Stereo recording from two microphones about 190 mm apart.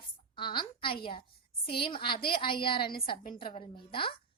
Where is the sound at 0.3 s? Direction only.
25° left (ahead or behind).